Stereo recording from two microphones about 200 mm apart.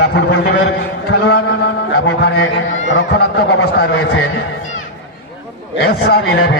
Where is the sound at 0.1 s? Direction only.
60° left (ahead or behind).